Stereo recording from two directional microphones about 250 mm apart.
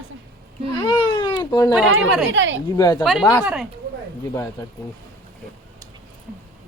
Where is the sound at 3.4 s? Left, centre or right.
Centre.